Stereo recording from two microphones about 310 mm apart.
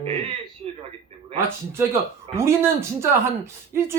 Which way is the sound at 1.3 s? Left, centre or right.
Centre.